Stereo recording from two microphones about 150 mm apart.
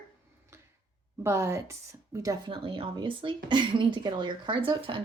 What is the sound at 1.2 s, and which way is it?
A woman's voice, 20° right (ahead or behind).